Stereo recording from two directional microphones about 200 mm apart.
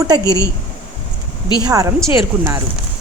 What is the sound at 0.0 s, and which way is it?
Speech, 20° right (ahead or behind).